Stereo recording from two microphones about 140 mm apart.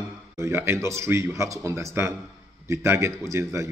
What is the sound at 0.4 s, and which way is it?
A man's voice, 20° right (ahead or behind).